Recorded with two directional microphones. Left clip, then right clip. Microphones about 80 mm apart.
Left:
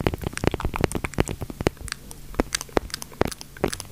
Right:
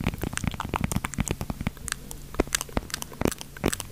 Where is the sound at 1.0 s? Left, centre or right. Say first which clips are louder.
Left 4 dB; centre.